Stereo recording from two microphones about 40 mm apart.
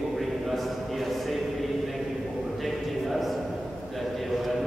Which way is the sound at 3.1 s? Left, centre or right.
Centre.